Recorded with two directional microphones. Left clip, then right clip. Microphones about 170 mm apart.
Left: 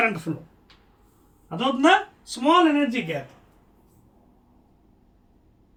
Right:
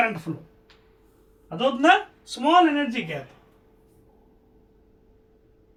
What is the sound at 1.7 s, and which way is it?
Speech, 20° right (ahead or behind).